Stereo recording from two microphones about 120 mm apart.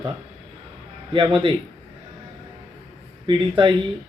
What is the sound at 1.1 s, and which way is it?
Speech, 45° right (ahead or behind).